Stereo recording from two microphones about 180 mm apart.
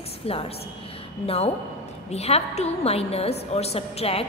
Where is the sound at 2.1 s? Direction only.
35° left (ahead or behind).